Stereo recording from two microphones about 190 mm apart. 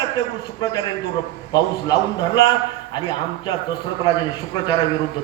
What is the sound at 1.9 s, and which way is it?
Speech, 20° left (ahead or behind).